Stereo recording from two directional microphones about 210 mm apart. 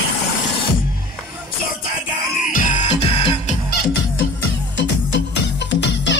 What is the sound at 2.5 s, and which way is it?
Music, 30° left (ahead or behind).